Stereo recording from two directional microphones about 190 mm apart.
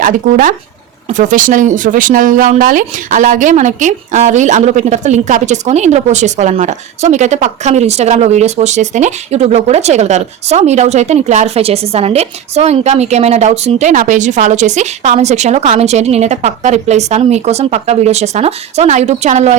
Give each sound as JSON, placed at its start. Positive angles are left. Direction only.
{"t": 0.0, "sound": "speech", "side_deg": -45}